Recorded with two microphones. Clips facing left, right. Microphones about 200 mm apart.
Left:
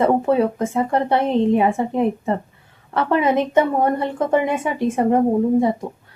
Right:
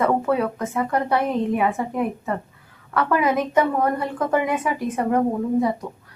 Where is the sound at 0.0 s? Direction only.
25° left (ahead or behind).